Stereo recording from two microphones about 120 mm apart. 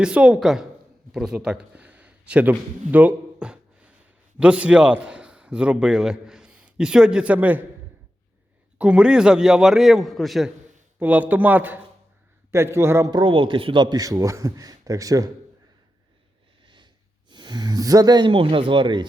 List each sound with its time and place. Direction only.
0.0 s a man's voice: 10° right (ahead or behind)
2.9 s a sound: 15° right (ahead or behind)
4.4 s a man's voice: 10° right (ahead or behind)
8.8 s a man's voice: 10° right (ahead or behind)
11.0 s a man's voice: 15° right (ahead or behind)
13.1 s a man's voice: 40° right (ahead or behind)
16.6 s speech: 40° right (ahead or behind)